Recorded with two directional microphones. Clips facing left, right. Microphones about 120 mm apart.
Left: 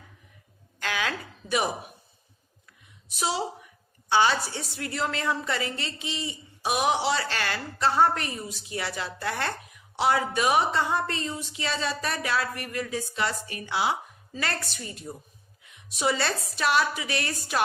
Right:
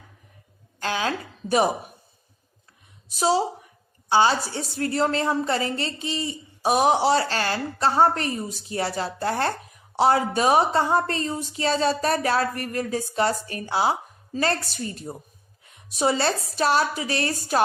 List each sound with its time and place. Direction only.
0.8 s a woman's voice: 30° right (ahead or behind)
3.1 s a woman's voice: 35° right (ahead or behind)